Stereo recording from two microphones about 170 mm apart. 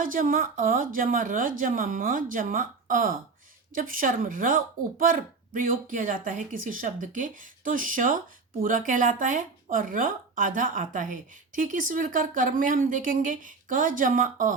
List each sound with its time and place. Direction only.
0.0 s speech: 55° right (ahead or behind)